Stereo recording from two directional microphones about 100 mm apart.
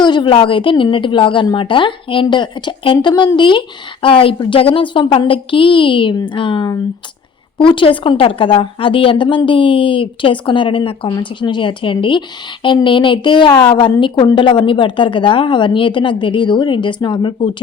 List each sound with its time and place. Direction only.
0.0 s a woman's voice: 50° left (ahead or behind)
4.0 s a woman's voice: 65° left (ahead or behind)